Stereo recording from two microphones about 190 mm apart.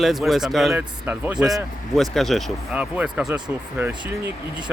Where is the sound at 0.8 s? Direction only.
10° right (ahead or behind).